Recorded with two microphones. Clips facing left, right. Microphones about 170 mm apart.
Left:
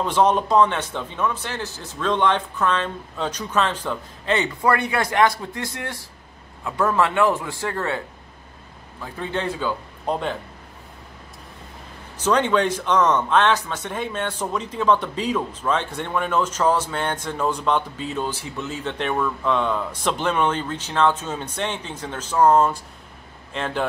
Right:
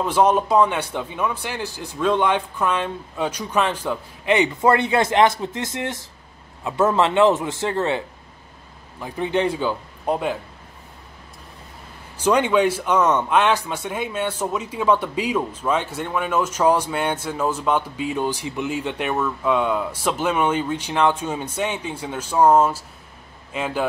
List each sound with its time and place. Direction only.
0.0 s speech: 10° right (ahead or behind)
9.0 s speech: 15° right (ahead or behind)
12.2 s speech: 10° right (ahead or behind)